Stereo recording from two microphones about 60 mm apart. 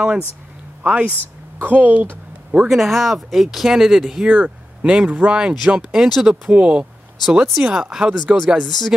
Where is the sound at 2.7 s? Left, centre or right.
Centre.